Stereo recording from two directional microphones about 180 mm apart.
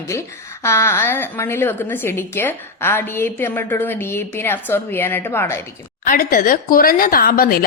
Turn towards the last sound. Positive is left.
turn(degrees=55)  # may be behind; listen again after turning